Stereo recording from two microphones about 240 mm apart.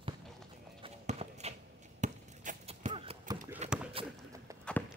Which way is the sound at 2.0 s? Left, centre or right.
Right.